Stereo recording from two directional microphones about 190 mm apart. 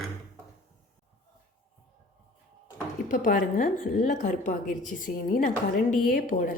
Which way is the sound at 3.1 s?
45° left (ahead or behind).